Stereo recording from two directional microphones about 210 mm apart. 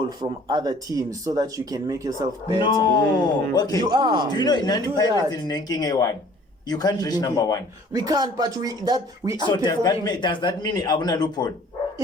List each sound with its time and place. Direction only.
0.2 s speech: 20° right (ahead or behind)
2.6 s a man's voice: 20° left (ahead or behind)
3.8 s speech: 20° right (ahead or behind)
4.3 s a man's voice: 20° left (ahead or behind)
7.9 s speech: 20° right (ahead or behind)
9.5 s a man's voice: 20° left (ahead or behind)